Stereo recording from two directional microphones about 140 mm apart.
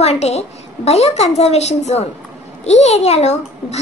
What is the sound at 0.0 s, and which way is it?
A child's voice, 50° left (ahead or behind).